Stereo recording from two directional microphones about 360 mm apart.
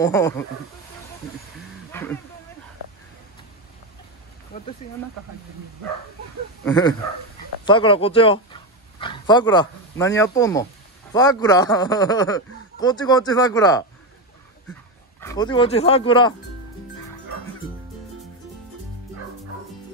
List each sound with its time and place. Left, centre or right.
0.0 s speech: centre
1.9 s a sound: centre
4.5 s speech: left
6.6 s speech: centre